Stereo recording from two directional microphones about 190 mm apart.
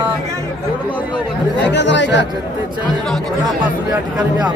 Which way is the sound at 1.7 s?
70° left (ahead or behind).